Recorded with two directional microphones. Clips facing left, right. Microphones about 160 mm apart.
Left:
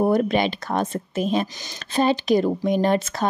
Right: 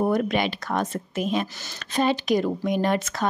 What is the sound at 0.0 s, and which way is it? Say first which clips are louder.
Speech: left 3 dB; 30° left (ahead or behind).